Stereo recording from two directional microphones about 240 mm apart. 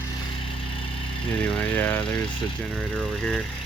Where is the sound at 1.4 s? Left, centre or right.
Centre.